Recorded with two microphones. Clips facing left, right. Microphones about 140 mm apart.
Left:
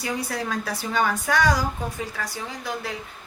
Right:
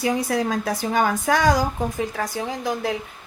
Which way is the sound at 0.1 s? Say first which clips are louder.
Right 2 dB; 45° right (ahead or behind).